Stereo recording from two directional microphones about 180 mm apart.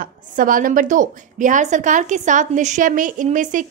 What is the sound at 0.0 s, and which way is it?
A woman's voice, 50° right (ahead or behind).